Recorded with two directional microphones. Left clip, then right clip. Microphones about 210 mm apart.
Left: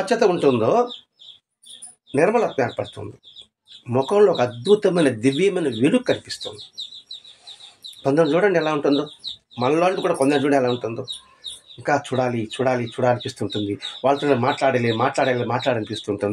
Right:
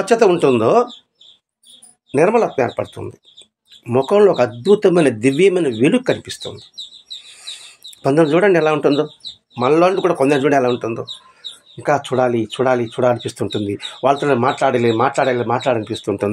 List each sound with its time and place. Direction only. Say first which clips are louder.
0.0 s speech: right 5 dB; 35° right (ahead or behind)
2.1 s speech: right 4 dB; 30° right (ahead or behind)
8.0 s speech: right 4 dB; 35° right (ahead or behind)